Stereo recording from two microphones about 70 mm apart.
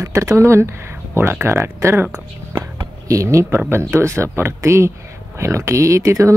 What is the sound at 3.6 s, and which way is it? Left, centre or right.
Speech, right.